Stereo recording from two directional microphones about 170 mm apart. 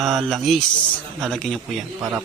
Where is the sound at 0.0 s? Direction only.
Centre (ahead or behind).